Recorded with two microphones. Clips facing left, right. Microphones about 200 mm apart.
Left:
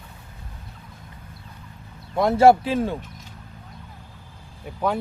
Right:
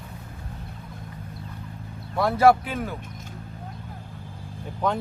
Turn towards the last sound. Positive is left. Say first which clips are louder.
# left 1 dB
turn(degrees=10)  # may be behind; listen again after turning